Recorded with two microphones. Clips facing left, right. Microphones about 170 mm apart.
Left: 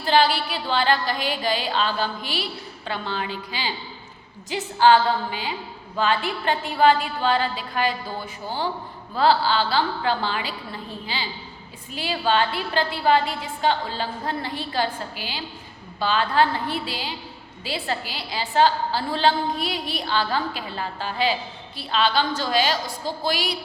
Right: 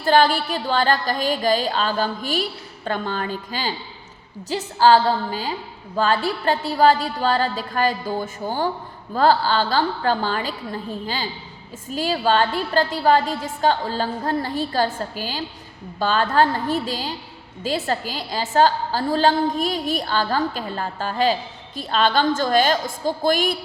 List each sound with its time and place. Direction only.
0.0 s a woman's voice: 45° right (ahead or behind)